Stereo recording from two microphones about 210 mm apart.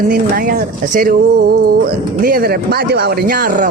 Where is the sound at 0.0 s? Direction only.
40° right (ahead or behind).